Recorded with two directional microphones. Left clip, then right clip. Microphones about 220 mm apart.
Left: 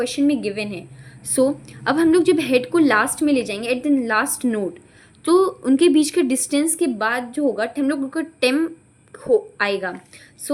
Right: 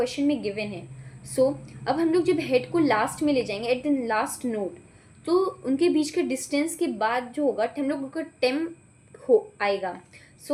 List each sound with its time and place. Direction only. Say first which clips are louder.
0.0 s a woman's voice: left 5 dB; 35° left (ahead or behind)